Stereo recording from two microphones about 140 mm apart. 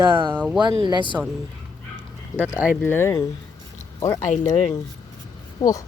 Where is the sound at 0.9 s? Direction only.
35° left (ahead or behind).